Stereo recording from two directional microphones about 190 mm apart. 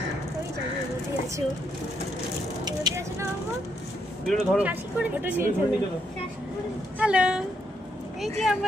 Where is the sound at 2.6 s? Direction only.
15° right (ahead or behind).